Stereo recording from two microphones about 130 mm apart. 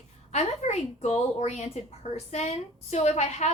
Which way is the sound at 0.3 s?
60° left (ahead or behind).